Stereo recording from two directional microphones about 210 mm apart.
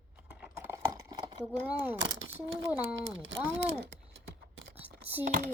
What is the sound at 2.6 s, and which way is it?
Speech, 10° right (ahead or behind).